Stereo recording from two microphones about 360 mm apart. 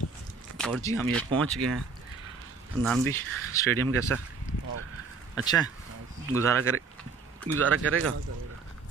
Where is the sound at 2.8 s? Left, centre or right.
Centre.